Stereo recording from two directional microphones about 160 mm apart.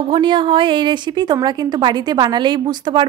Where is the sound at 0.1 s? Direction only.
30° right (ahead or behind).